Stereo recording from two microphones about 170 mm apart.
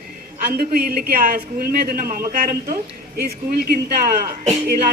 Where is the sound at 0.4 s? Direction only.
60° right (ahead or behind).